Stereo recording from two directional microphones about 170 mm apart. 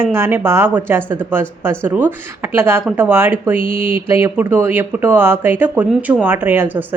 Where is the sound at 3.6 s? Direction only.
55° right (ahead or behind).